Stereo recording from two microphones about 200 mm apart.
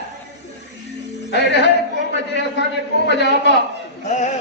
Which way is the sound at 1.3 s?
60° left (ahead or behind).